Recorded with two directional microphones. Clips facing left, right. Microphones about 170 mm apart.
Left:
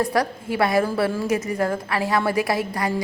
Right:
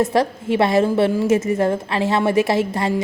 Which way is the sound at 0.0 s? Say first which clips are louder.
Right 4 dB; 25° right (ahead or behind).